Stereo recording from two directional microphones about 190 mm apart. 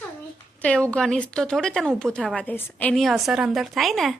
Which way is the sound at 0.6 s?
5° left (ahead or behind).